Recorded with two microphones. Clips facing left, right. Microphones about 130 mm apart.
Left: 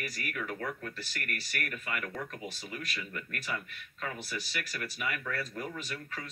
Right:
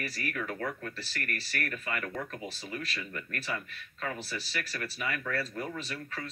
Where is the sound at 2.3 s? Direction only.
30° right (ahead or behind).